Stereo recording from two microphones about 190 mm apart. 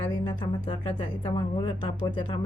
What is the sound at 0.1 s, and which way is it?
A woman's voice, 25° left (ahead or behind).